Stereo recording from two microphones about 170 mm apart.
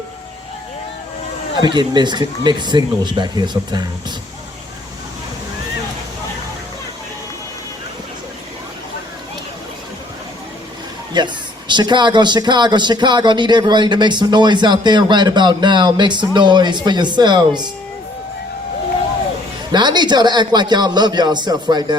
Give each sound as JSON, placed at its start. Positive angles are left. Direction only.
{"t": 1.6, "sound": "speech", "side_deg": -25}
{"t": 11.1, "sound": "speech", "side_deg": -25}
{"t": 19.7, "sound": "speech", "side_deg": -25}